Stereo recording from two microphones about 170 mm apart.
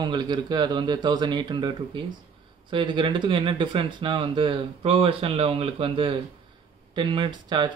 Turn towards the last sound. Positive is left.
turn(degrees=-30)  # may be behind; listen again after turning